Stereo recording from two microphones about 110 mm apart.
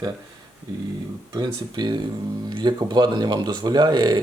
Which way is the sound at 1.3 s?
40° right (ahead or behind).